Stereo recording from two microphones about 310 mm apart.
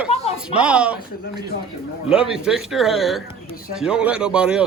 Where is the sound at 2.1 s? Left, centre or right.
Centre.